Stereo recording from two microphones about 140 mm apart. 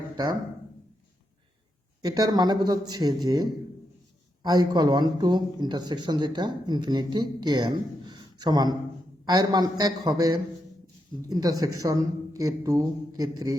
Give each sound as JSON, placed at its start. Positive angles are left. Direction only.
{"t": 2.0, "sound": "a woman's voice", "side_deg": -30}